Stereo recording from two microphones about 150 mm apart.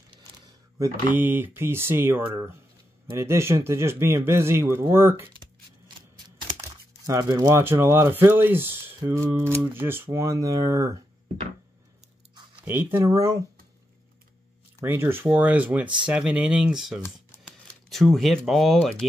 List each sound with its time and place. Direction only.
1.1 s speech: 15° right (ahead or behind)
7.1 s speech: 20° right (ahead or behind)
12.6 s speech: 15° right (ahead or behind)
14.8 s speech: 15° right (ahead or behind); by 19.0 s 5° left (ahead or behind)